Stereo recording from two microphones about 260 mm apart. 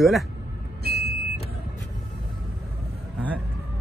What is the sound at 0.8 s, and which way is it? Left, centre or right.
Vehicle, right.